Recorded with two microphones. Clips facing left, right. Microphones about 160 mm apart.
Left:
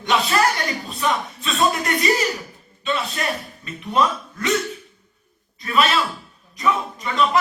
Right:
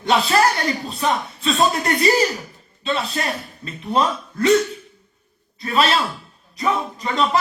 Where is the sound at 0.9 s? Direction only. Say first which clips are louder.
Right 1 dB; 35° right (ahead or behind).